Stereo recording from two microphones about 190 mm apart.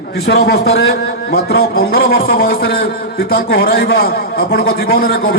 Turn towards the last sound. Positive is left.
turn(degrees=50)  # may be behind; listen again after turning